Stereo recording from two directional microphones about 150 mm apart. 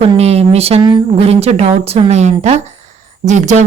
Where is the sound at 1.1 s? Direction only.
40° right (ahead or behind).